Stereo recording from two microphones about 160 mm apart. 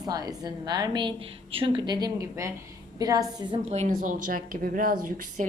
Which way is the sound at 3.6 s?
45° right (ahead or behind).